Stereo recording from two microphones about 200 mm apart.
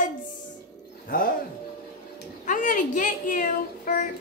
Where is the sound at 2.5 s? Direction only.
40° left (ahead or behind).